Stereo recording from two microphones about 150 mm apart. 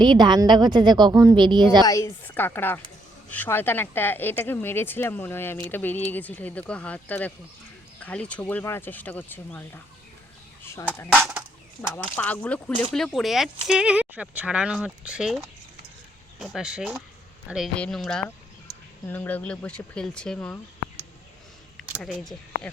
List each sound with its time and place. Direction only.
0.0 s a woman's voice: 30° right (ahead or behind)
1.8 s speech: 20° left (ahead or behind)
10.6 s a sound: 15° left (ahead or behind)
11.1 s speech: 10° right (ahead or behind)
11.9 s speech: 10° left (ahead or behind)
22.0 s speech: centre (ahead or behind)